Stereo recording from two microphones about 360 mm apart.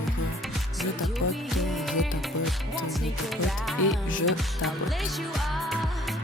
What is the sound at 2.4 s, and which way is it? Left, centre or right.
Music, centre.